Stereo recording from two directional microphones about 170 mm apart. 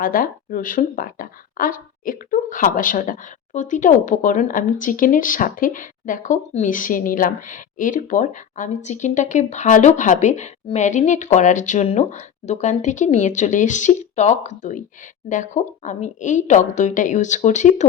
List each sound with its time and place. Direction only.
0.0 s a woman's voice: 55° left (ahead or behind)